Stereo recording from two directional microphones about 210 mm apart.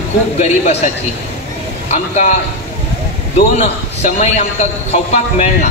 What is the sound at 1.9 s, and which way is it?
Speech, 35° left (ahead or behind).